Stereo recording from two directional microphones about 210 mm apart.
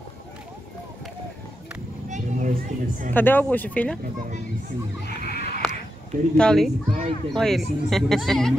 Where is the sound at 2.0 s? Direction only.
35° right (ahead or behind).